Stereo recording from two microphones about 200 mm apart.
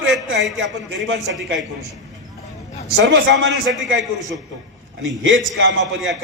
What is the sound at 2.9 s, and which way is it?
A man's voice, 65° right (ahead or behind).